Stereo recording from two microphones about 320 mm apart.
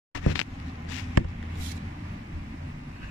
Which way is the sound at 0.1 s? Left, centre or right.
Left.